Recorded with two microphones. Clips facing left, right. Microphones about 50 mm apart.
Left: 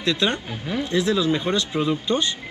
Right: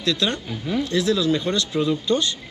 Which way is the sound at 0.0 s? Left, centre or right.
Left.